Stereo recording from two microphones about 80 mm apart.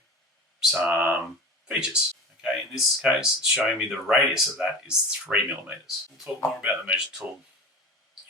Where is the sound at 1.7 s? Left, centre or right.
Centre.